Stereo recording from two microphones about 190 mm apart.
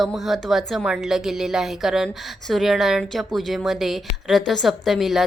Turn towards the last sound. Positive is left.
turn(degrees=0)  # may be behind; listen again after turning